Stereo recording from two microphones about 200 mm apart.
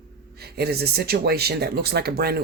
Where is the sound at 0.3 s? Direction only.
50° right (ahead or behind).